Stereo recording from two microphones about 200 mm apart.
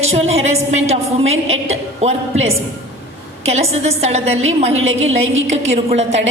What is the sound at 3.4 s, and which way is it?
A woman's voice, 30° right (ahead or behind).